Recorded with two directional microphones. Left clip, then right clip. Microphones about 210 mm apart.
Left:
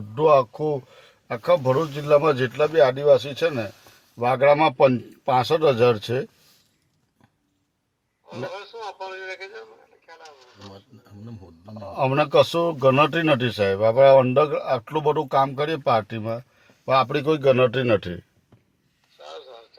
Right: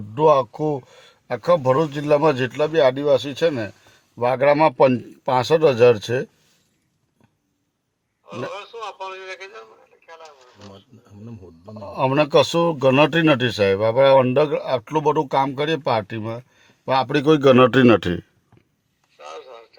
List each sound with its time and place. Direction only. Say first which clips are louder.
0.1 s a man's voice: right 1 dB; 30° right (ahead or behind)
11.6 s a man's voice: right 2 dB; 35° right (ahead or behind); by 18.2 s 55° right (ahead or behind)
19.1 s a sound: right 3 dB; 25° right (ahead or behind)